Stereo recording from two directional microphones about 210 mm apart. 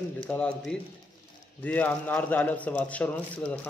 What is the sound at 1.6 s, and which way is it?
A man's voice, 5° left (ahead or behind).